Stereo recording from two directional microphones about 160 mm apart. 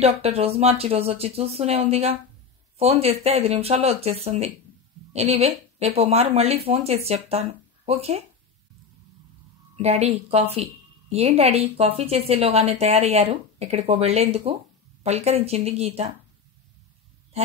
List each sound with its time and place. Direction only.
0.0 s a woman's voice: 40° right (ahead or behind)
9.8 s a woman's voice: 40° right (ahead or behind)